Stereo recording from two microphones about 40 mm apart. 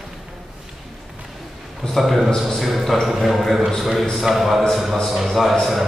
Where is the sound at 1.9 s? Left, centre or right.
Centre.